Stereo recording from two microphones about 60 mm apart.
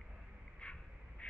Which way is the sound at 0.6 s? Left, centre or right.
Centre.